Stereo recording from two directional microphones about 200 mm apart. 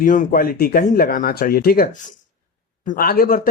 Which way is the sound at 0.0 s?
40° left (ahead or behind).